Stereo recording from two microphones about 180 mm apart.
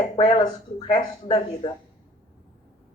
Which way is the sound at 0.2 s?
25° left (ahead or behind).